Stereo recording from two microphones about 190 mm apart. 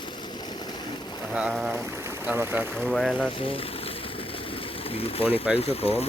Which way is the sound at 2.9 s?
Centre (ahead or behind).